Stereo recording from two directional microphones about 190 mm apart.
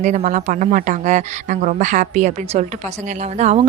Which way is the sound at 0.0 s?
40° right (ahead or behind).